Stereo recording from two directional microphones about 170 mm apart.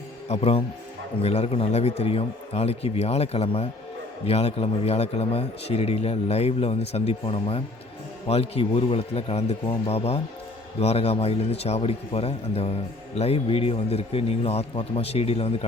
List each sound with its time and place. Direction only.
0.3 s speech: 35° left (ahead or behind)